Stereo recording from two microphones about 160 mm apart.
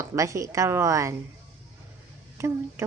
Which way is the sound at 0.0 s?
20° right (ahead or behind).